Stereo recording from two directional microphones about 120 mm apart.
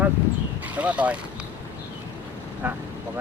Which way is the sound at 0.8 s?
10° right (ahead or behind).